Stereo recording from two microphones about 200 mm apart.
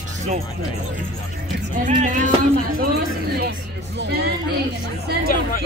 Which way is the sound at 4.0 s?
55° right (ahead or behind).